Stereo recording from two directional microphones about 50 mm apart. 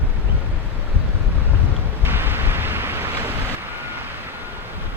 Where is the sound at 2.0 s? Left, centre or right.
Right.